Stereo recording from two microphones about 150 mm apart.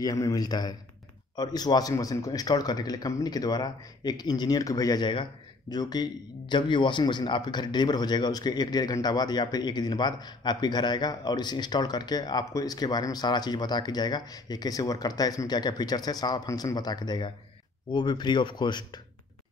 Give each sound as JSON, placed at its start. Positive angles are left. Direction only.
{"t": 0.0, "sound": "a man's voice", "side_deg": 25}